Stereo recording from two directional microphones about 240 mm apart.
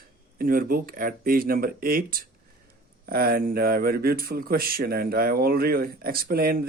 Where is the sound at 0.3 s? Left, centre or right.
Right.